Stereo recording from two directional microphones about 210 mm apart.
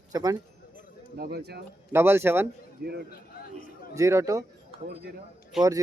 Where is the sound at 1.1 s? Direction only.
50° right (ahead or behind).